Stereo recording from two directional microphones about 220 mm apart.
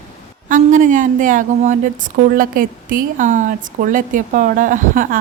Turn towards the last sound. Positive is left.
turn(degrees=-35)  # may be behind; listen again after turning